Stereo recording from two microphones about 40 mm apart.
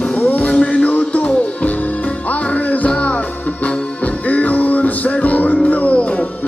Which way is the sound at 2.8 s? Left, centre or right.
Left.